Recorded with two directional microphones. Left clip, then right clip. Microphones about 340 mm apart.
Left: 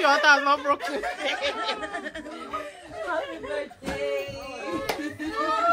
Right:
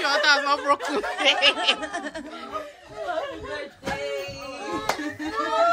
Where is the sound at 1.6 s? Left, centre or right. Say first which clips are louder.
Right 5 dB; right.